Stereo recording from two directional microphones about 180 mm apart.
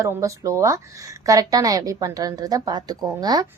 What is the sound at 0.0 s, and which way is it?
A woman's voice, 15° right (ahead or behind).